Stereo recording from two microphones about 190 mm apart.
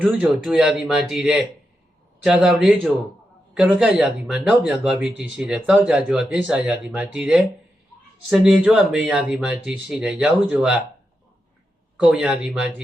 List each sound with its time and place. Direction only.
0.0 s speech: 5° right (ahead or behind)
11.9 s speech: 5° right (ahead or behind)